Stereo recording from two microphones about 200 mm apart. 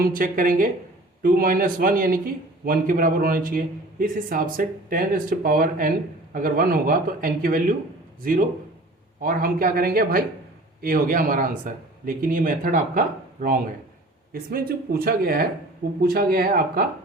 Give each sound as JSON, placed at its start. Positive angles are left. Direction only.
{"t": 0.0, "sound": "a man's voice", "side_deg": -45}